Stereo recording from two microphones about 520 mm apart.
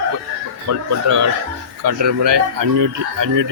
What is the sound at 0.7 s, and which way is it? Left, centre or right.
Speech, right.